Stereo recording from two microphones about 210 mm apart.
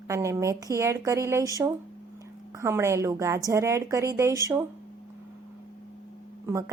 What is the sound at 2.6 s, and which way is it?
A woman's voice, 15° right (ahead or behind).